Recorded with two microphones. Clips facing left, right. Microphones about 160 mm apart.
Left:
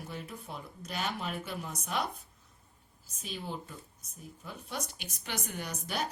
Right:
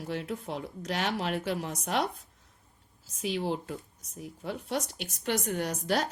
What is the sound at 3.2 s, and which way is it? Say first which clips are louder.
Speech: right 9 dB; 90° right.